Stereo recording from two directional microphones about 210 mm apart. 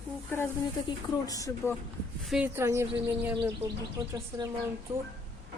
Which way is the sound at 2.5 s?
15° right (ahead or behind).